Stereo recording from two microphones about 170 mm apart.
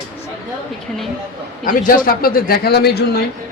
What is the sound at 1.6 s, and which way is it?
A man's voice, 55° left (ahead or behind).